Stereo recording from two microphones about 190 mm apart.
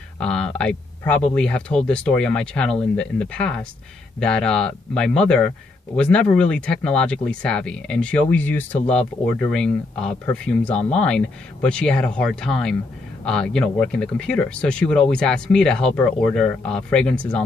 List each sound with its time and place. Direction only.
0.2 s speech: 5° left (ahead or behind)
10.7 s speech: 35° left (ahead or behind)
11.0 s speech: 5° left (ahead or behind)